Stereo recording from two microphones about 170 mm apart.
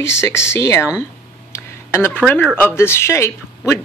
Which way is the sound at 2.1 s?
5° left (ahead or behind).